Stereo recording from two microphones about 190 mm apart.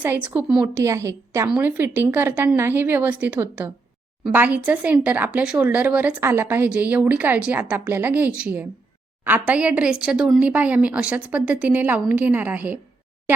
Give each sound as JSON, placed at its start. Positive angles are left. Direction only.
{"t": 0.0, "sound": "speech", "side_deg": -10}
{"t": 0.7, "sound": "speech", "side_deg": -15}